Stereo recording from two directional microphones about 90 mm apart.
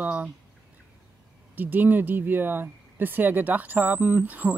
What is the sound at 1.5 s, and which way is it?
Speech, 20° right (ahead or behind).